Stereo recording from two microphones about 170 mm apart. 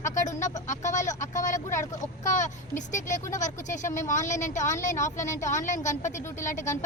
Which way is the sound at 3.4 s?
45° left (ahead or behind).